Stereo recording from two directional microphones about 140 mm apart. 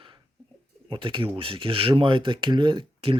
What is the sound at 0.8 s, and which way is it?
Speech, 35° right (ahead or behind).